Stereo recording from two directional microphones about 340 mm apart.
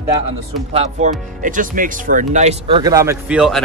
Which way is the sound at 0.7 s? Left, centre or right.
Centre.